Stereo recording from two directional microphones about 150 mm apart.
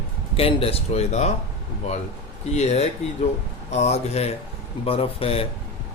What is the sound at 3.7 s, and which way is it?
Speech, 45° left (ahead or behind).